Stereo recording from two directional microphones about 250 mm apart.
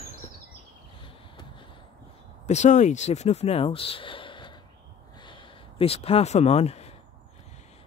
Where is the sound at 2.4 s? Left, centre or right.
Left.